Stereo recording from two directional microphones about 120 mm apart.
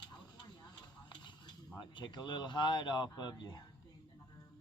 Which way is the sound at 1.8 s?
40° left (ahead or behind).